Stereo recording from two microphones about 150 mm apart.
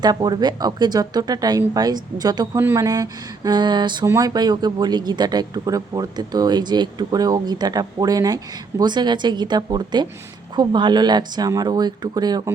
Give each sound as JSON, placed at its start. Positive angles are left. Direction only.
{"t": 0.0, "sound": "speech", "side_deg": -25}